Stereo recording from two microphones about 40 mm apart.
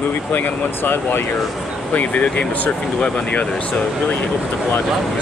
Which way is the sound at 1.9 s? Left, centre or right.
Left.